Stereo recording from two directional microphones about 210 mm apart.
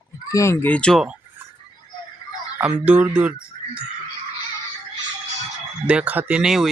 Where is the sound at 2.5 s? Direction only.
5° right (ahead or behind).